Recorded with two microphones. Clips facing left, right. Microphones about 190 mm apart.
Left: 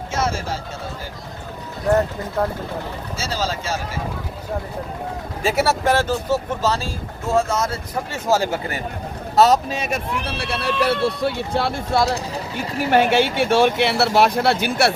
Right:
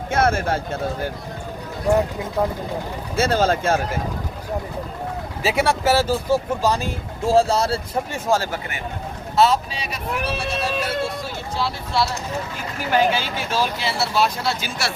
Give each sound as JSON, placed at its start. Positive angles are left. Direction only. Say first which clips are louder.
{"t": 0.1, "sound": "speech", "louder": "right 5 dB", "side_deg": -55}
{"t": 1.9, "sound": "speech", "louder": "left 1 dB", "side_deg": -10}
{"t": 3.2, "sound": "speech", "louder": "right 8 dB", "side_deg": -55}
{"t": 5.5, "sound": "speech", "louder": "even", "side_deg": 0}
{"t": 7.3, "sound": "speech", "louder": "right 3 dB", "side_deg": -35}
{"t": 8.4, "sound": "speech", "louder": "left 4 dB", "side_deg": 30}
{"t": 10.2, "sound": "speech", "louder": "even", "side_deg": 60}
{"t": 12.9, "sound": "speech", "louder": "left 3 dB", "side_deg": 65}